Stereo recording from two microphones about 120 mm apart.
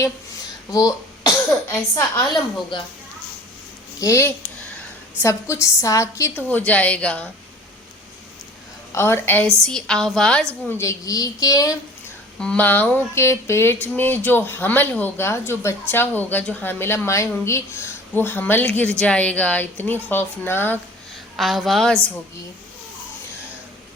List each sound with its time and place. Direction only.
0.7 s speech: 30° left (ahead or behind)
4.0 s a woman's voice: 25° left (ahead or behind)
8.9 s a woman's voice: 20° left (ahead or behind)
9.6 s a woman's voice: 5° left (ahead or behind)
10.7 s a woman's voice: 25° left (ahead or behind)
12.4 s a woman's voice: 10° left (ahead or behind)
21.3 s a woman's voice: centre (ahead or behind)